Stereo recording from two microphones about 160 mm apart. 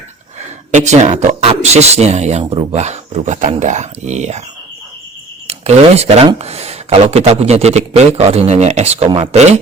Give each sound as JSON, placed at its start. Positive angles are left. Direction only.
{"t": 0.7, "sound": "speech", "side_deg": -45}
{"t": 2.4, "sound": "speech", "side_deg": -30}
{"t": 2.7, "sound": "speech", "side_deg": -45}
{"t": 5.5, "sound": "speech", "side_deg": -40}